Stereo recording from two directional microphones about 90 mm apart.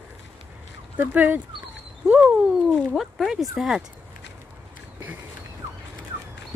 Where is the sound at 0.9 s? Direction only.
20° right (ahead or behind).